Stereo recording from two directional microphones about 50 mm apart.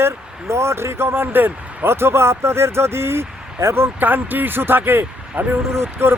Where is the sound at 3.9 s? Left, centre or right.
Right.